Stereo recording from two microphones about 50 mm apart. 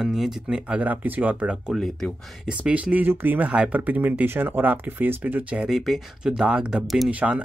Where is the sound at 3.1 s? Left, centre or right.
Right.